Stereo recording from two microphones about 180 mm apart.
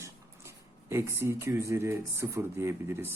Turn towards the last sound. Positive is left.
turn(degrees=-15)  # may be behind; listen again after turning